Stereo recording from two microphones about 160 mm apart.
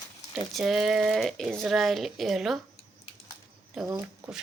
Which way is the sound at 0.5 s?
Centre (ahead or behind).